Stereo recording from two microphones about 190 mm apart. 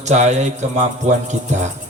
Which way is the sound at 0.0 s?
40° right (ahead or behind).